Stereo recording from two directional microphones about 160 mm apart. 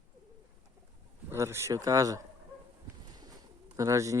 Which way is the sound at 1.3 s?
15° right (ahead or behind).